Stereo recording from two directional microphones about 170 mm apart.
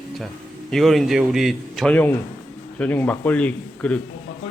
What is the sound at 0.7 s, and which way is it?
A man's voice, centre (ahead or behind).